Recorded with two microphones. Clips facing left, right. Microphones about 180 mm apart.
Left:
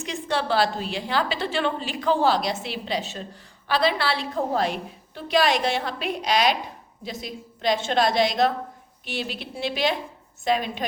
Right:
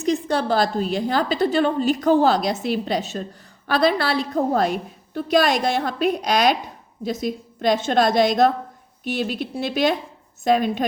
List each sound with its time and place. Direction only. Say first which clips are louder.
0.0 s a woman's voice: right 6 dB; 40° right (ahead or behind)